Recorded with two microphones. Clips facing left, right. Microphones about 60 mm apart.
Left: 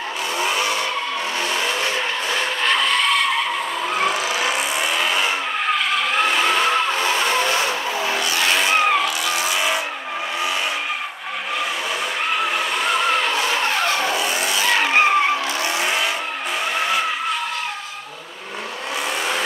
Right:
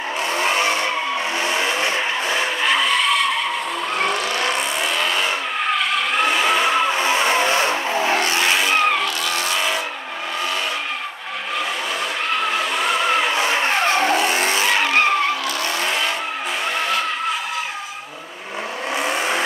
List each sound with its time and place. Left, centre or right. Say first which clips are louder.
0.4 s vehicle: right 2 dB; right
1.4 s vehicle: right 1 dB; right
7.9 s vehicle: right 3 dB; right
8.5 s vehicle: even; centre
12.3 s vehicle: right 1 dB; centre
13.3 s vehicle: right 1 dB; right
15.0 s vehicle: left 1 dB; centre
19.0 s vehicle: right 2 dB; right